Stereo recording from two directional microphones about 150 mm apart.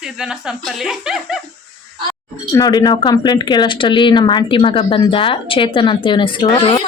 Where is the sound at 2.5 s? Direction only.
25° left (ahead or behind).